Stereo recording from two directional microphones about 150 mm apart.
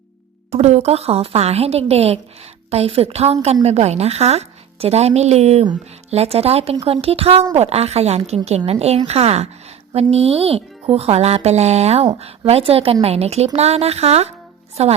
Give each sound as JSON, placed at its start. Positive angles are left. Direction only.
{"t": 0.5, "sound": "speech", "side_deg": -45}